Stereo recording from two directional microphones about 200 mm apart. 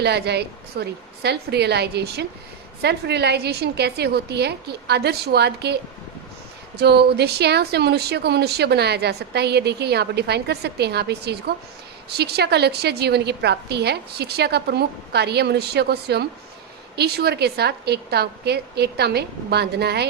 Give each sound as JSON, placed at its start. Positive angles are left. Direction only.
{"t": 0.0, "sound": "speech", "side_deg": -55}